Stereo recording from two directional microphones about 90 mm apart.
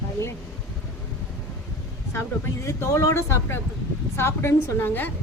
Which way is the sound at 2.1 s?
30° left (ahead or behind).